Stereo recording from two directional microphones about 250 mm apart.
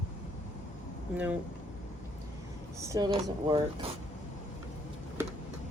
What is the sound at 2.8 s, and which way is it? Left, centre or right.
Speech, centre.